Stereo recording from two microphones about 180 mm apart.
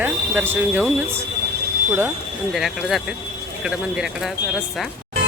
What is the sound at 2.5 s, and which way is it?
Speech, centre (ahead or behind).